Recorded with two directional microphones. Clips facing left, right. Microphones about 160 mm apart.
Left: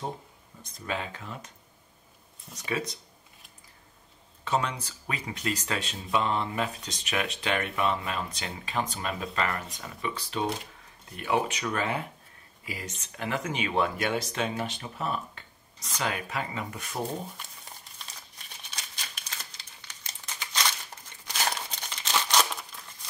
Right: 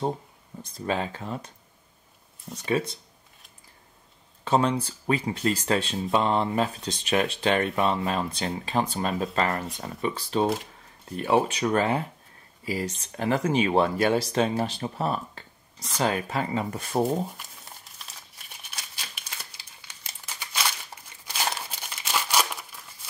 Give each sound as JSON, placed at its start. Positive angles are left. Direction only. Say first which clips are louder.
{"t": 0.6, "sound": "speech", "louder": "right 6 dB", "side_deg": -30}
{"t": 2.5, "sound": "speech", "louder": "right 6 dB", "side_deg": -30}
{"t": 4.5, "sound": "speech", "louder": "right 6 dB", "side_deg": -30}
{"t": 17.4, "sound": "crumpling", "louder": "even", "side_deg": -5}